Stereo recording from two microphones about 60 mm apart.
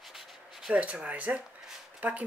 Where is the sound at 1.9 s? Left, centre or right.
Right.